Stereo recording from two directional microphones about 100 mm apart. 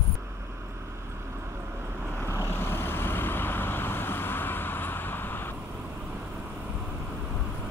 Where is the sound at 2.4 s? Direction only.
20° left (ahead or behind).